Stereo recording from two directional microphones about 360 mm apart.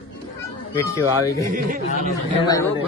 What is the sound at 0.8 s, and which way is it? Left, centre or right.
Speech, centre.